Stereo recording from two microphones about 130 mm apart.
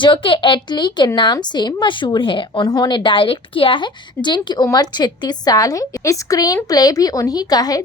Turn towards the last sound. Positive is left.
turn(degrees=30)  # may be behind; listen again after turning